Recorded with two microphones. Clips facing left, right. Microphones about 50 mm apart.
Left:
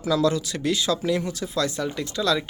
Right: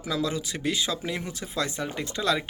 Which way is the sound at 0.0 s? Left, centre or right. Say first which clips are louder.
Left 7 dB; centre.